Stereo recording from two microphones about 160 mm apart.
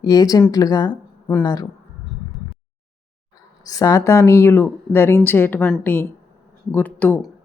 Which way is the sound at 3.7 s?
20° left (ahead or behind).